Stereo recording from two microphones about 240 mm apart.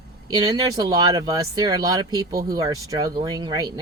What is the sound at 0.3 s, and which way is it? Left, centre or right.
Speech, centre.